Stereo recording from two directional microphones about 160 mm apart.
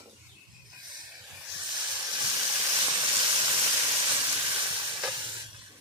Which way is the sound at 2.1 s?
25° right (ahead or behind).